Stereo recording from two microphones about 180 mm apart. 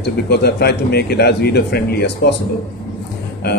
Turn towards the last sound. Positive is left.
turn(degrees=65)  # may be behind; listen again after turning